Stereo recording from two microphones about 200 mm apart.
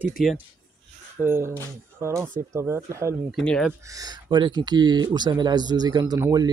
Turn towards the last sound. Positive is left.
turn(degrees=-20)  # may be behind; listen again after turning